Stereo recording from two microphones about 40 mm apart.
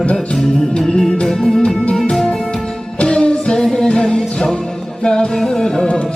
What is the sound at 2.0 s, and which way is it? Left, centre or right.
Music, centre.